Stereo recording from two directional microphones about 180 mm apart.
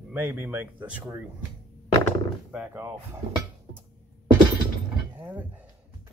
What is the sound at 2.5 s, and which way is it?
Speech, 10° right (ahead or behind).